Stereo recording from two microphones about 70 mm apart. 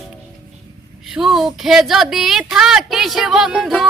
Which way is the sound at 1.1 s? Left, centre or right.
Centre.